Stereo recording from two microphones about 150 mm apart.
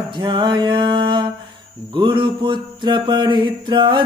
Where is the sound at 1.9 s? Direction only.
35° right (ahead or behind).